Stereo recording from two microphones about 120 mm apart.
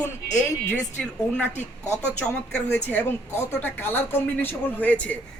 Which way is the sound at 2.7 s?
15° left (ahead or behind).